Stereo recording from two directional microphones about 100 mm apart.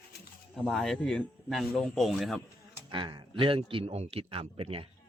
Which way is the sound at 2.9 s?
55° right (ahead or behind).